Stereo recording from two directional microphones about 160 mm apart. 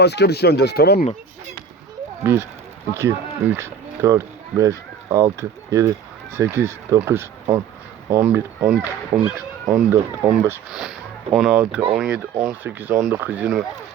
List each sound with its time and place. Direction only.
0.0 s speech: 90° left
2.3 s speech: 15° right (ahead or behind)
10.7 s speech: 5° right (ahead or behind)